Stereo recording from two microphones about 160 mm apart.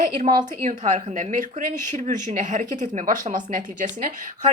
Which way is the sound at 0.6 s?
50° right (ahead or behind).